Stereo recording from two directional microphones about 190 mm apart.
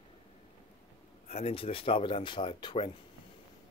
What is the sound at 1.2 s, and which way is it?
Speech, 35° left (ahead or behind).